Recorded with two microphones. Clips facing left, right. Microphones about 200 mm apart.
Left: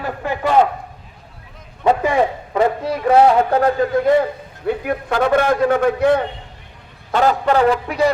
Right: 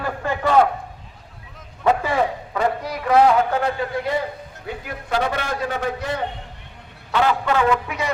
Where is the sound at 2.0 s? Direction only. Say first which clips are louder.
Left 4 dB; 25° left (ahead or behind); by 6.2 s 60° left (ahead or behind).